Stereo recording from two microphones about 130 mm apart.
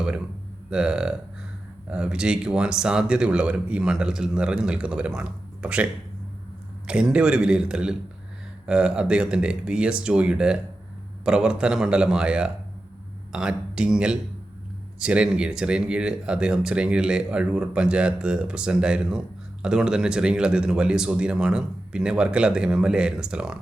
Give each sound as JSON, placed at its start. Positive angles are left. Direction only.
{"t": 0.7, "sound": "speech", "side_deg": -5}